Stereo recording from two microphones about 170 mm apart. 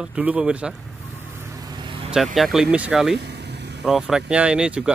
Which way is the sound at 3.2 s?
80° right.